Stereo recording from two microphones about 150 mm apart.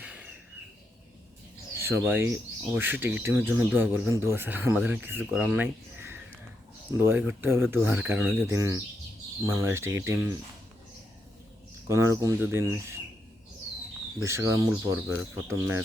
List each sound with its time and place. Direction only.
0.0 s a sound: 10° right (ahead or behind)
1.8 s speech: 15° right (ahead or behind)
11.9 s speech: 20° right (ahead or behind)
14.2 s speech: 20° right (ahead or behind)
14.7 s speech: 5° right (ahead or behind); by 15.8 s 20° right (ahead or behind)